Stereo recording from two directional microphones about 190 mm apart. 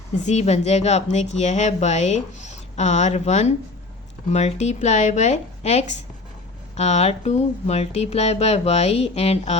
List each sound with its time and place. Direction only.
0.3 s a woman's voice: 35° left (ahead or behind)